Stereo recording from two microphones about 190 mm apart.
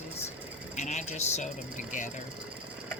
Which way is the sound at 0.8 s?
40° left (ahead or behind).